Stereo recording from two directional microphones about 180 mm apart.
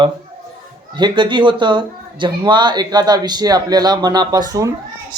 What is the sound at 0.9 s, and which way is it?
Speech, 25° right (ahead or behind).